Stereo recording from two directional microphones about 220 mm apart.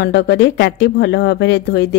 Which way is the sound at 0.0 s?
50° left (ahead or behind).